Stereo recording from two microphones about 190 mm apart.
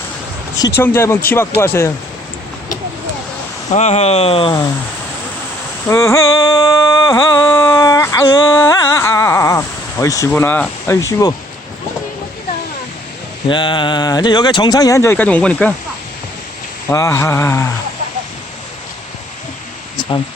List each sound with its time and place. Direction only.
0.6 s speech: 15° left (ahead or behind)
3.8 s speech: 35° left (ahead or behind)
5.9 s music: 15° left (ahead or behind)
13.5 s speech: 25° left (ahead or behind); by 15.7 s 5° left (ahead or behind)
16.9 s speech: 15° left (ahead or behind)
20.0 s a sound: 25° left (ahead or behind)